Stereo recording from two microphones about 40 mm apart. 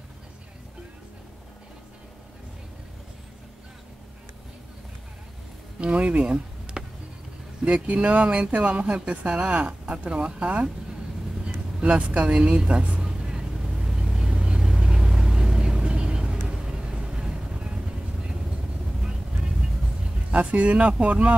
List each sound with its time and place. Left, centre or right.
5.8 s speech: right
6.8 s a sound: centre
7.6 s speech: right
9.3 s speech: right
13.0 s vehicle: centre
20.2 s speech: right